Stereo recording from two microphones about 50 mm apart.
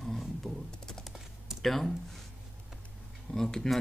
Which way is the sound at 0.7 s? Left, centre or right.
Centre.